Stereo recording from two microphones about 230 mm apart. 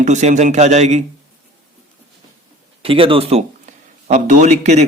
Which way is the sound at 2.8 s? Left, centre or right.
Right.